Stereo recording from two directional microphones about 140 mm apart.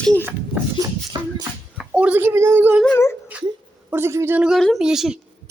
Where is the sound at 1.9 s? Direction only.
10° right (ahead or behind).